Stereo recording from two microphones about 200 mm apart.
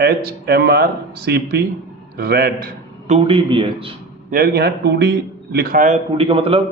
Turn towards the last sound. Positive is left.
turn(degrees=-25)  # may be behind; listen again after turning